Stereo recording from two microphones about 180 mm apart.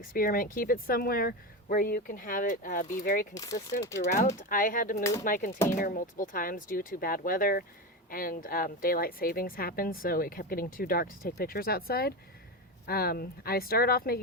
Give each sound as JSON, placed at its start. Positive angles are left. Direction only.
{"t": 0.0, "sound": "speech", "side_deg": 50}
{"t": 3.3, "sound": "speech", "side_deg": 20}
{"t": 4.4, "sound": "a woman's voice", "side_deg": 50}